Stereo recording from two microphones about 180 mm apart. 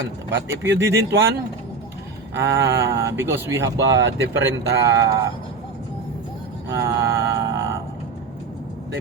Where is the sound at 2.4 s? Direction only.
75° right (ahead or behind).